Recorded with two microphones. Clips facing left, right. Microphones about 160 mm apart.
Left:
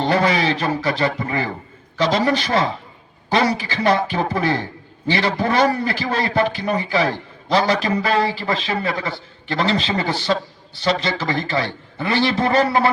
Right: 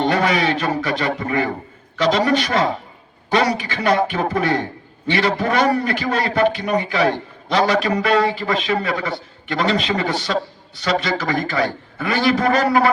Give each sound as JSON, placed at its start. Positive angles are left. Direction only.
{"t": 0.0, "sound": "a man's voice", "side_deg": 30}